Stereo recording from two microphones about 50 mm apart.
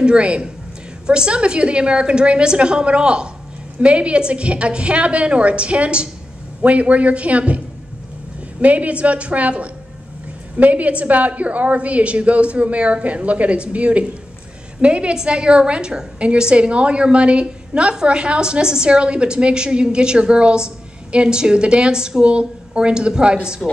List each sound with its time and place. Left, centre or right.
0.0 s a woman's voice: right